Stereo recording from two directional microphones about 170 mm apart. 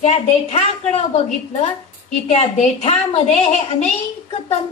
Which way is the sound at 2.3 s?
40° left (ahead or behind).